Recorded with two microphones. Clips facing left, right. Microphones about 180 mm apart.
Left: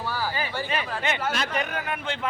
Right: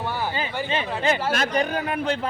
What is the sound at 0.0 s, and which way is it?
Speech, 20° right (ahead or behind).